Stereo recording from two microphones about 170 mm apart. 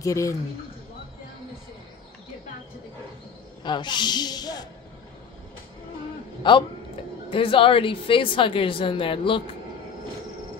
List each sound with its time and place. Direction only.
0.0 s a man's voice: 20° left (ahead or behind)
3.6 s speech: 25° left (ahead or behind)
6.4 s a woman's voice: 30° left (ahead or behind)